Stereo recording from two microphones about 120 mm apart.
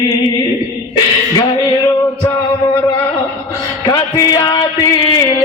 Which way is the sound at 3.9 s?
30° left (ahead or behind).